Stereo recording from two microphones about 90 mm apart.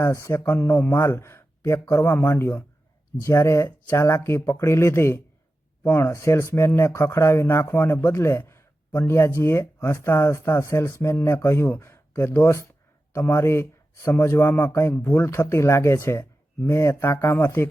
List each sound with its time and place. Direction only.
0.0 s a man's voice: 35° left (ahead or behind)